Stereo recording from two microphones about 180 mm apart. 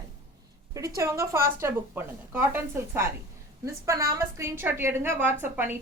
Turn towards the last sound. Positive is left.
turn(degrees=-10)  # may be behind; listen again after turning